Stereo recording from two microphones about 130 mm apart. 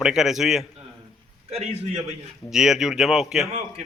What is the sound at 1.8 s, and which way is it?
Speech, 55° right (ahead or behind).